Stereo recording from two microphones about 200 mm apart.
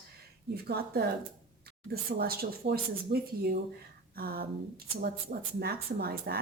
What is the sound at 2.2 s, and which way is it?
A woman's voice, 50° right (ahead or behind).